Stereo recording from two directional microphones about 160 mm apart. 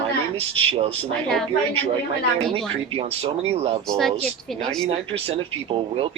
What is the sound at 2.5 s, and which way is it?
Speech, 35° right (ahead or behind).